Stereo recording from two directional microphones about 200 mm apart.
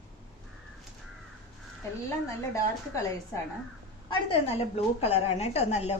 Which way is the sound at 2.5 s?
15° left (ahead or behind).